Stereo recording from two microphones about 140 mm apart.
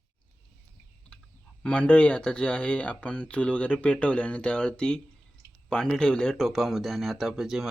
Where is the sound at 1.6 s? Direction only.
10° left (ahead or behind).